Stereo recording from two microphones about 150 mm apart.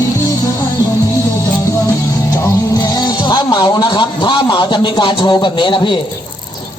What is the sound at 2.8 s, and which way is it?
Music, 25° left (ahead or behind).